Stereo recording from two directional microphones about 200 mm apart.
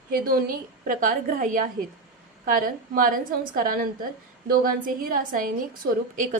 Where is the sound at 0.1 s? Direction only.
45° right (ahead or behind).